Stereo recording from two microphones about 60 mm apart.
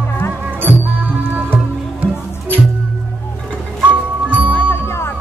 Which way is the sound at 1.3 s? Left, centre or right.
Right.